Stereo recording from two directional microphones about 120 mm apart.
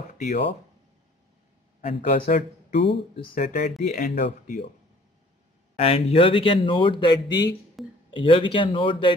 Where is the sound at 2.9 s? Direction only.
50° left (ahead or behind).